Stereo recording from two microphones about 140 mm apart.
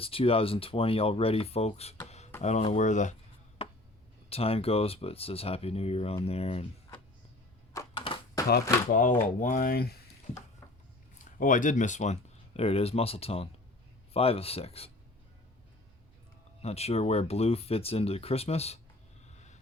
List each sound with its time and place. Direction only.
0.0 s speech: 40° left (ahead or behind)
2.0 s beatboxing: 50° left (ahead or behind)
2.4 s speech: 55° left (ahead or behind)
4.3 s speech: 45° left (ahead or behind)
7.9 s a sound: 40° left (ahead or behind)
8.9 s speech: 70° left (ahead or behind); by 10.0 s 90° left
11.3 s speech: 70° left (ahead or behind); by 14.8 s 45° left (ahead or behind)
16.6 s speech: 45° left (ahead or behind)